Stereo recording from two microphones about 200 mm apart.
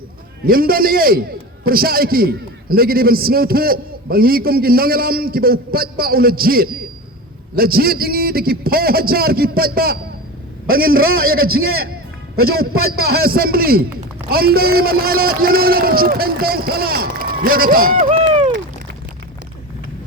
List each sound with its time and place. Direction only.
0.4 s a man's voice: 45° right (ahead or behind)
11.3 s a man's voice: 90° right
13.1 s a man's voice: 50° right (ahead or behind)
18.1 s a sound: 30° right (ahead or behind)